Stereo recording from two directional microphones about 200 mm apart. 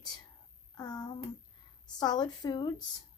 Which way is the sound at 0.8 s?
20° left (ahead or behind).